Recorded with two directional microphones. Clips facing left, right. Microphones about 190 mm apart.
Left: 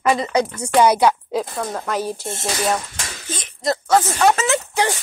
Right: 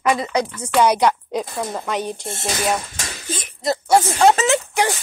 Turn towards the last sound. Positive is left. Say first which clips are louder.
# right 1 dB
turn(degrees=-15)  # may be behind; listen again after turning